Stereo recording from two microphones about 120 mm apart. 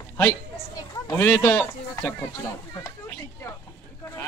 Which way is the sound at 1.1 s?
20° left (ahead or behind).